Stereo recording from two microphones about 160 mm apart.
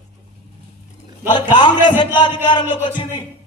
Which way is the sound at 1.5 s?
30° left (ahead or behind).